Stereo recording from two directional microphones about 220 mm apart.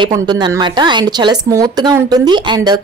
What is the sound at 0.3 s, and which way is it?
A woman's voice, 20° right (ahead or behind).